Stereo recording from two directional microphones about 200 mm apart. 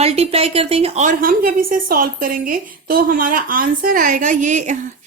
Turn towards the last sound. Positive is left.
turn(degrees=-40)  # may be behind; listen again after turning